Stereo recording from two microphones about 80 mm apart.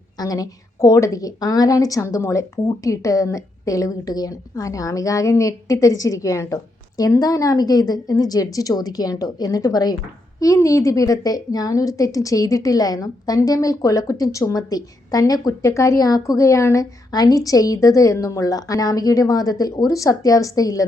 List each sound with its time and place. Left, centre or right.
0.2 s a woman's voice: left
10.4 s a woman's voice: left
17.1 s a woman's voice: left